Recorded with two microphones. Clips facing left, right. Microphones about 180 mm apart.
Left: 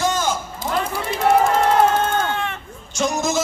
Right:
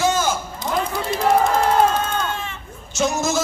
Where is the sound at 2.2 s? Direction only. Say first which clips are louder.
Left 3 dB; 65° left (ahead or behind).